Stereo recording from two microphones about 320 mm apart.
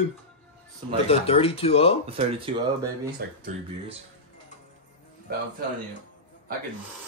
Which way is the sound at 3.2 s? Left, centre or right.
Right.